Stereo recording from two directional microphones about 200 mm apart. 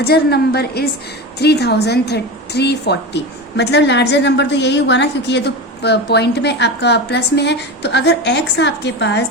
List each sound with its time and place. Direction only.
0.0 s a woman's voice: 55° left (ahead or behind)